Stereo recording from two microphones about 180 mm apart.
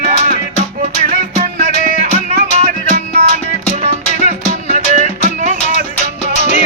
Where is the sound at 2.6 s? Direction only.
45° right (ahead or behind).